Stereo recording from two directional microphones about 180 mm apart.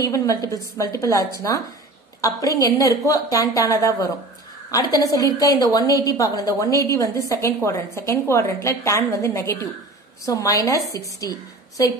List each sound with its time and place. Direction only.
0.0 s a woman's voice: 20° left (ahead or behind)